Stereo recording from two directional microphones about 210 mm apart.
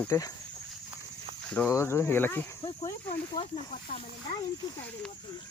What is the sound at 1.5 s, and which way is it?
Speech, 10° left (ahead or behind).